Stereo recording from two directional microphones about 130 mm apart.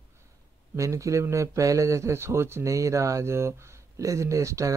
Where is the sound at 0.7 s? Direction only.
25° right (ahead or behind).